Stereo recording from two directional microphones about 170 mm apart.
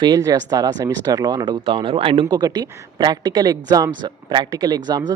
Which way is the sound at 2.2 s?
20° right (ahead or behind).